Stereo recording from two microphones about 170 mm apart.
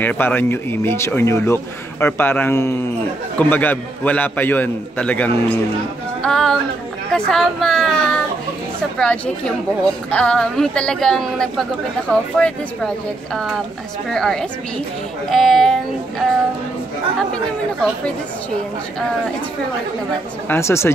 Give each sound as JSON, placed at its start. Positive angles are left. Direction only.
{"t": 0.0, "sound": "speech", "side_deg": 10}
{"t": 6.2, "sound": "a sound", "side_deg": 5}
{"t": 7.1, "sound": "a woman's voice", "side_deg": 0}
{"t": 20.4, "sound": "speech", "side_deg": 15}